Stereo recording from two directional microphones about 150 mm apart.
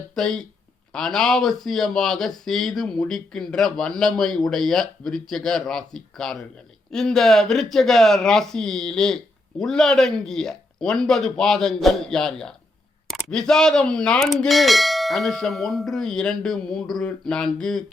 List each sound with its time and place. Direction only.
0.1 s speech: 5° left (ahead or behind)